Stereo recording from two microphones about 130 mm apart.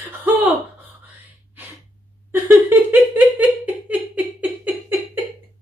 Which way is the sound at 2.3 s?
15° right (ahead or behind).